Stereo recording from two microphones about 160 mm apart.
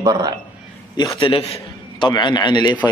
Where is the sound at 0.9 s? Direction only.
30° left (ahead or behind).